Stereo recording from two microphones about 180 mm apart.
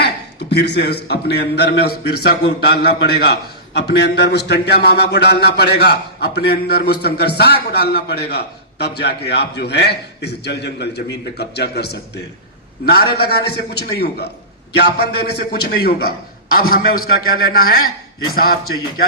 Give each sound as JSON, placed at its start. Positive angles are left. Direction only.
{"t": 0.0, "sound": "a man's voice", "side_deg": 70}